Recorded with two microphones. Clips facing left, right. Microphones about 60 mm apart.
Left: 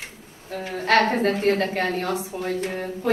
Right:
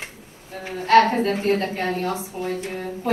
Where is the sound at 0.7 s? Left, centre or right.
Left.